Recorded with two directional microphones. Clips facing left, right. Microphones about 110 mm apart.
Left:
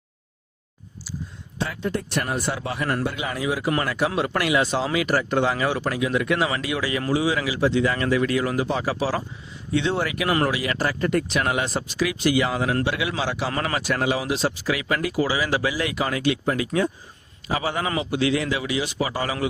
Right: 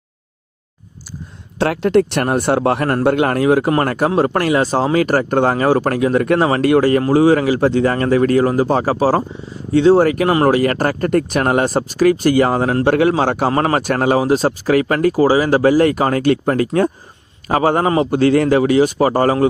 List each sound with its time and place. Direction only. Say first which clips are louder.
1.5 s a man's voice: right 13 dB; 75° right (ahead or behind); by 3.7 s 55° right (ahead or behind)
3.7 s speech: right 8 dB; 45° right (ahead or behind)